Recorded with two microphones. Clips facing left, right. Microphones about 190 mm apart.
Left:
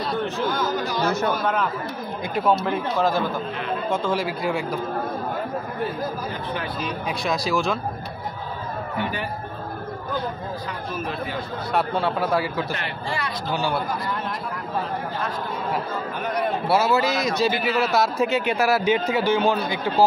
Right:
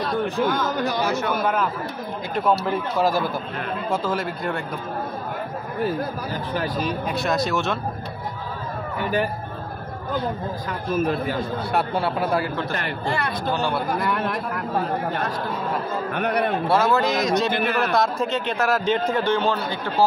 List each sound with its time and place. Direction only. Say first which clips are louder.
0.2 s a man's voice: right 3 dB; 15° right (ahead or behind)
3.0 s a man's voice: right 1 dB; 10° right (ahead or behind)
6.5 s speech: right 6 dB; 40° right (ahead or behind)
7.1 s a man's voice: left 1 dB; centre (ahead or behind)
11.7 s a man's voice: left 1 dB; centre (ahead or behind)
12.7 s speech: right 3 dB; 50° right (ahead or behind)
13.9 s speech: right 4 dB; 65° right (ahead or behind)
16.2 s speech: right 4 dB; 65° right (ahead or behind)
16.6 s a man's voice: left 1 dB; 5° left (ahead or behind)